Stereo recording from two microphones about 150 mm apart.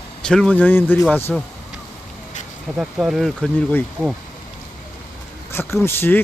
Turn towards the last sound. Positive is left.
turn(degrees=15)  # may be behind; listen again after turning